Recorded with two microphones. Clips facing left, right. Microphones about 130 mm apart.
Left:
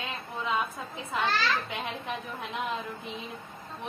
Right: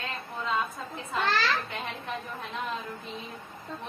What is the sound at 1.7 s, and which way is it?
A woman's voice, 15° left (ahead or behind).